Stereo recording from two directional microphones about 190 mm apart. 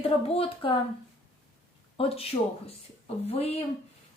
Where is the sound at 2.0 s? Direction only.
30° left (ahead or behind).